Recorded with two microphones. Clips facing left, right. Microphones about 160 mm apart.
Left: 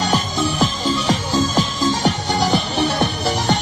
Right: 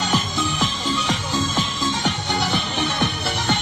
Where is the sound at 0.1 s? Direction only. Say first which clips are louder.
Left 3 dB; 35° left (ahead or behind).